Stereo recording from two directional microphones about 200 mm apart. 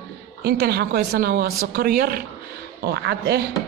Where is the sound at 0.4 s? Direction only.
55° right (ahead or behind).